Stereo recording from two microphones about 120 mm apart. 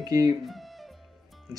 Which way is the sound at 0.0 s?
30° right (ahead or behind).